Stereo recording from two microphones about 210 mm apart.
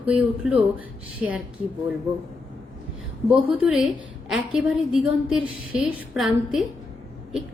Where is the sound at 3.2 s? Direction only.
5° right (ahead or behind).